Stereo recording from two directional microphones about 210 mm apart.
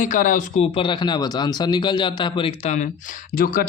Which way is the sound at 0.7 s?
25° left (ahead or behind).